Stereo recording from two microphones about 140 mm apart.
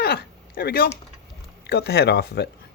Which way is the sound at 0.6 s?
90° left.